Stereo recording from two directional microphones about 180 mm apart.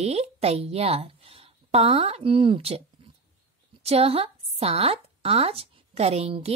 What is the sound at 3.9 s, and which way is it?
A woman's voice, 35° right (ahead or behind).